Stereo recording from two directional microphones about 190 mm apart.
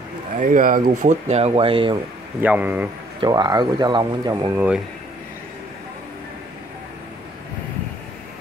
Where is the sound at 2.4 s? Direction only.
10° right (ahead or behind).